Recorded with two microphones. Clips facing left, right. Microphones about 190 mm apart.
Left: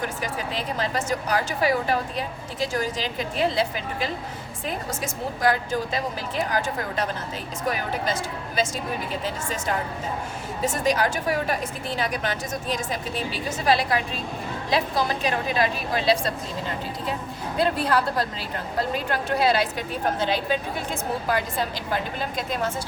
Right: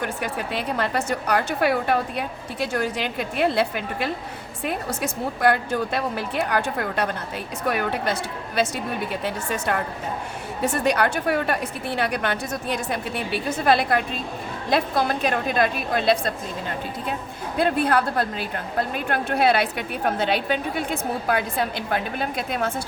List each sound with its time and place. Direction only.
0.0 s a woman's voice: 60° right (ahead or behind)
17.6 s a woman's voice: 55° right (ahead or behind)